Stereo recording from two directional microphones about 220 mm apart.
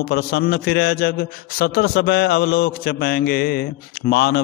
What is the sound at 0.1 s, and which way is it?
A man's voice, 45° left (ahead or behind).